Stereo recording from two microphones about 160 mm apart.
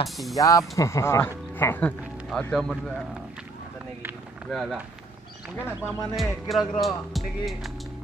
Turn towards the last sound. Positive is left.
turn(degrees=0)  # may be behind; listen again after turning